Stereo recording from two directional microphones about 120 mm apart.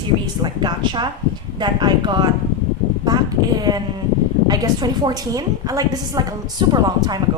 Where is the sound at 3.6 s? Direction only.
35° right (ahead or behind).